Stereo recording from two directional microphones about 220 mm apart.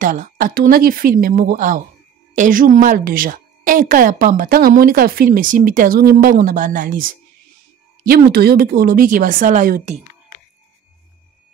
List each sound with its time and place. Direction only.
0.0 s a woman's voice: 40° right (ahead or behind)